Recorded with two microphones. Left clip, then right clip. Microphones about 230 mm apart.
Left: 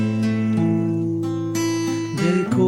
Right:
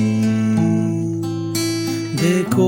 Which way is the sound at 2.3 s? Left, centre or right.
Right.